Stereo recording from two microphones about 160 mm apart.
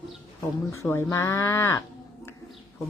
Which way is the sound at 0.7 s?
15° left (ahead or behind).